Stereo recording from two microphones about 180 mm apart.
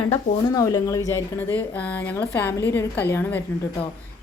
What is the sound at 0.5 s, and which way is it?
A woman's voice, 15° left (ahead or behind).